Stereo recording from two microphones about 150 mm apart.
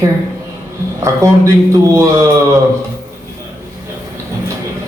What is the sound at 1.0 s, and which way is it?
A man's voice, 20° right (ahead or behind).